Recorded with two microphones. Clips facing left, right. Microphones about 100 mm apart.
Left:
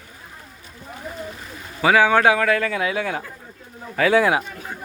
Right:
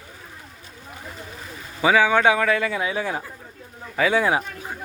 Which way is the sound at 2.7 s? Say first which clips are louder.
Left 2 dB; 25° right (ahead or behind).